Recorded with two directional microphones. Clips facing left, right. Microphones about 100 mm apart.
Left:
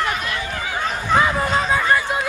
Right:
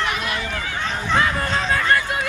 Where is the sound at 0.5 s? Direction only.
10° left (ahead or behind).